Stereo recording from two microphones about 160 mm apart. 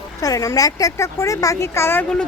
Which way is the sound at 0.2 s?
20° left (ahead or behind).